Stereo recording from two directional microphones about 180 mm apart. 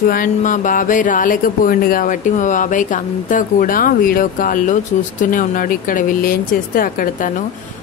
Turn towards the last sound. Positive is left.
turn(degrees=50)  # may be behind; listen again after turning